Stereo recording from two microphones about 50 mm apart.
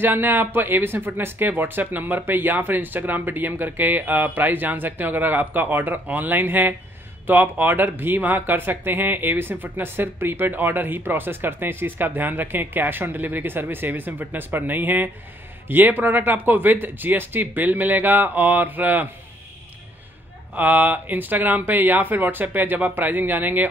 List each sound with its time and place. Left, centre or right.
0.0 s speech: right
20.5 s speech: right